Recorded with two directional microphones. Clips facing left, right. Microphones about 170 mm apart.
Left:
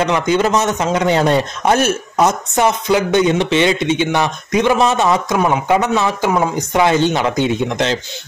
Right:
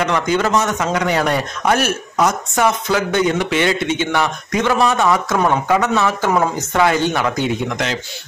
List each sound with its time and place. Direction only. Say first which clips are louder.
0.0 s a man's voice: left 2 dB; 20° left (ahead or behind)